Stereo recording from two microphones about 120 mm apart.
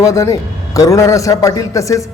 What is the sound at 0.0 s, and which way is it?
A man's voice, 25° left (ahead or behind).